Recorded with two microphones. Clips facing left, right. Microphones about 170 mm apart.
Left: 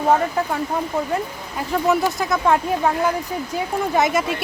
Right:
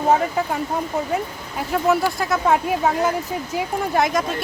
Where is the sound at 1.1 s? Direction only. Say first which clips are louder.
Even; 5° right (ahead or behind).